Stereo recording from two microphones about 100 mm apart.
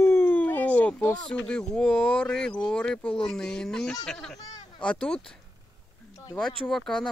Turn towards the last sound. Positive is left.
turn(degrees=5)  # may be behind; listen again after turning